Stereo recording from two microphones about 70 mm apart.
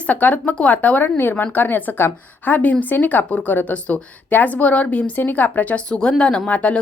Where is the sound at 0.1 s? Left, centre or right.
Left.